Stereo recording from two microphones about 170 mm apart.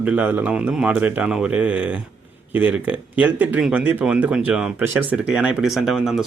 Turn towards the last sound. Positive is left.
turn(degrees=0)  # may be behind; listen again after turning